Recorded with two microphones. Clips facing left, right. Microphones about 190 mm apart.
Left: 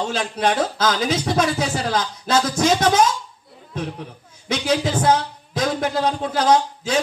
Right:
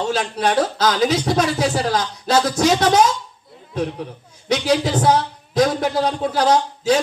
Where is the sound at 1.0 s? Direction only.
50° right (ahead or behind).